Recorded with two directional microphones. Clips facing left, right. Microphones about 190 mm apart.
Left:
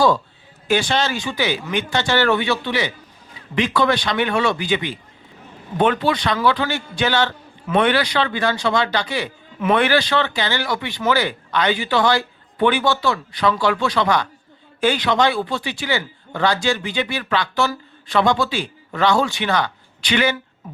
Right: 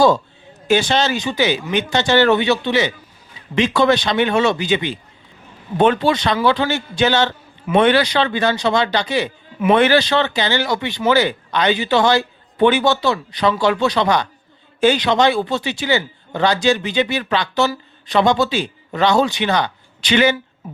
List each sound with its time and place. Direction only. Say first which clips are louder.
0.7 s a man's voice: right 3 dB; 20° right (ahead or behind)